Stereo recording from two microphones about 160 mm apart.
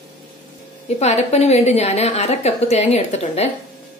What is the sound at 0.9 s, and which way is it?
A woman's voice, 45° left (ahead or behind).